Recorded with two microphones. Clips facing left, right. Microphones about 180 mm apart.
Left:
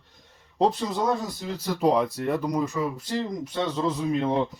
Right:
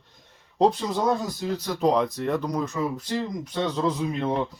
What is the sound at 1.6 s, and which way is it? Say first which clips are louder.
Speech: left 1 dB; 5° left (ahead or behind).